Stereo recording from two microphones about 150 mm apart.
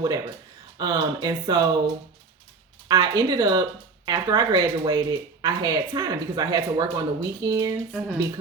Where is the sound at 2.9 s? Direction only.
25° right (ahead or behind).